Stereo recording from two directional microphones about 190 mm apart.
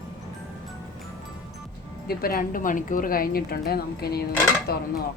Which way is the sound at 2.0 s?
50° left (ahead or behind).